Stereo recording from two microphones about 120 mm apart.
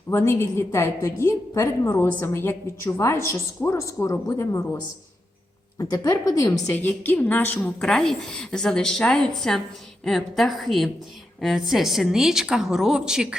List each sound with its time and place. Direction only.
0.1 s a woman's voice: 20° left (ahead or behind)
6.7 s a woman's voice: 15° left (ahead or behind); by 13.2 s 5° right (ahead or behind)